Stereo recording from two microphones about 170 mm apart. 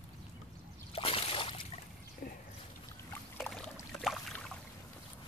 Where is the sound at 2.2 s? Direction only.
50° left (ahead or behind).